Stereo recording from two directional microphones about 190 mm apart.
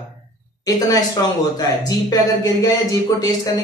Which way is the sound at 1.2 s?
20° left (ahead or behind).